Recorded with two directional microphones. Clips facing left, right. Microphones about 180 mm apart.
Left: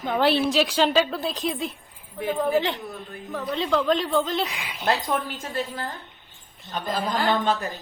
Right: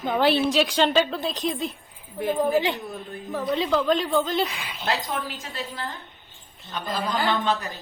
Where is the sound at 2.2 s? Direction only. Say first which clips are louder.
Right 1 dB; 10° right (ahead or behind).